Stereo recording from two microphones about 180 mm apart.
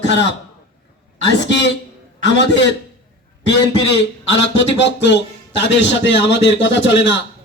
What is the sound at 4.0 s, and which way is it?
Speech, 90° left.